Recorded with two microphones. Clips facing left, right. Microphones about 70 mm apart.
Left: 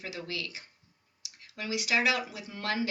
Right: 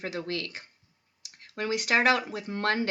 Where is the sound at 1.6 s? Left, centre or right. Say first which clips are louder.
Right 4 dB; right.